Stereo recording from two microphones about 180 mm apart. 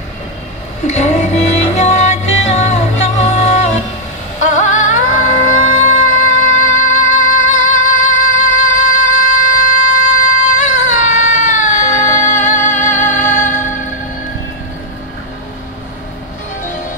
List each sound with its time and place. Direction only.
0.8 s music: 40° left (ahead or behind)
4.4 s a sound: 45° left (ahead or behind)
6.5 s music: 45° left (ahead or behind)